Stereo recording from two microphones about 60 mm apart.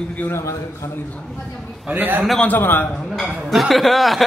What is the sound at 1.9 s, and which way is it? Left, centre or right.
Speech, right.